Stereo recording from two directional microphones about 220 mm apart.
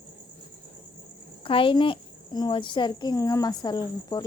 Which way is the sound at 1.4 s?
25° left (ahead or behind).